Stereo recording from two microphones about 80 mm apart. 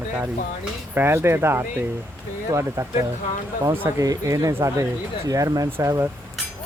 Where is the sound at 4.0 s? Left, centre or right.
Right.